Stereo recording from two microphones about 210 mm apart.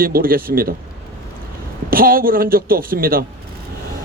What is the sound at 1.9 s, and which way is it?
A man's voice, 45° right (ahead or behind).